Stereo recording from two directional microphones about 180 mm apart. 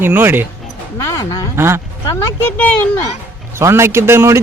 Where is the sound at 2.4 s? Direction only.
10° left (ahead or behind).